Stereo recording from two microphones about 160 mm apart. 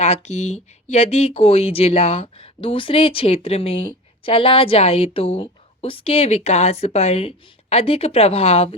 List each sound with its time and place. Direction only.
0.0 s a woman's voice: 45° left (ahead or behind)